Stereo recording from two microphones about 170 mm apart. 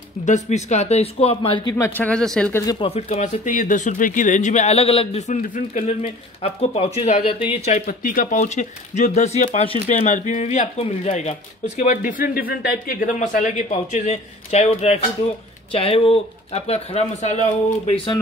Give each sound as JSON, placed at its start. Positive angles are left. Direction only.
{"t": 0.2, "sound": "speech", "side_deg": 45}
{"t": 1.8, "sound": "speech", "side_deg": 10}
{"t": 2.5, "sound": "speech", "side_deg": 20}
{"t": 2.9, "sound": "speech", "side_deg": 40}
{"t": 6.0, "sound": "speech", "side_deg": 35}
{"t": 7.6, "sound": "speech", "side_deg": 50}